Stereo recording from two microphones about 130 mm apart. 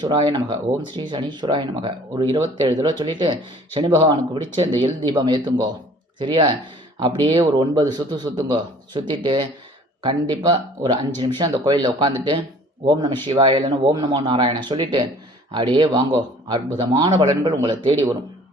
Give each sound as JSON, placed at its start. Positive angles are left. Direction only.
{"t": 0.0, "sound": "speech", "side_deg": -35}